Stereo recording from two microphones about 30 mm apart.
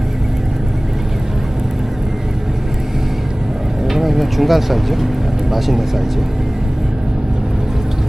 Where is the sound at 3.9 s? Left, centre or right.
Centre.